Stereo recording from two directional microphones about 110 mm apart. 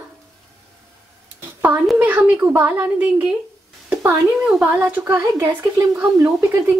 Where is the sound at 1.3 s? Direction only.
15° right (ahead or behind).